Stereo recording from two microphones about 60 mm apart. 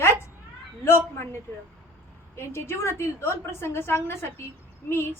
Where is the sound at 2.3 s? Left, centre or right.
Left.